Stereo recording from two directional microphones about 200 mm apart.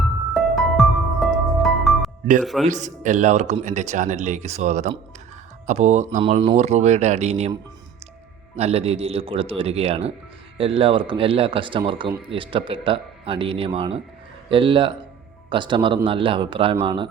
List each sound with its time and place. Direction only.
0.3 s music: centre (ahead or behind)
2.4 s speech: centre (ahead or behind)
2.6 s speech: 35° right (ahead or behind)
6.2 s speech: 25° right (ahead or behind)
8.5 s speech: 30° right (ahead or behind)